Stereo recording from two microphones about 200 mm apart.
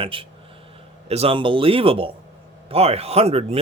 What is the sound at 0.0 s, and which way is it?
A man's voice, 25° right (ahead or behind).